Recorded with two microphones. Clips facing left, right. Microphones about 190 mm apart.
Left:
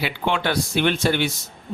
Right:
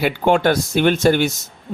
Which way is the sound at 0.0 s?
45° right (ahead or behind).